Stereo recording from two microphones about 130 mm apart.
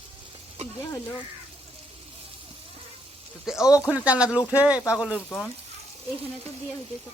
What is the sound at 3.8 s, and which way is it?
Speech, 10° right (ahead or behind).